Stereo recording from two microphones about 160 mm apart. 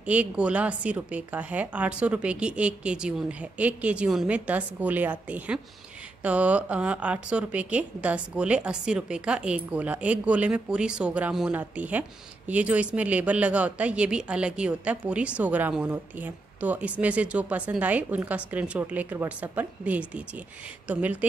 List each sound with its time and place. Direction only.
0.0 s speech: 10° right (ahead or behind)